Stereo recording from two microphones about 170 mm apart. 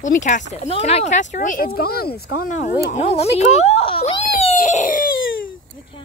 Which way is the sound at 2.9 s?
40° left (ahead or behind).